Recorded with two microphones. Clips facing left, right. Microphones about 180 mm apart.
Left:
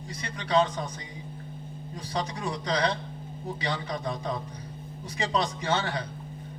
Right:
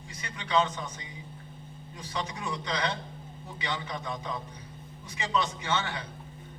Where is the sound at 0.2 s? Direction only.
35° left (ahead or behind).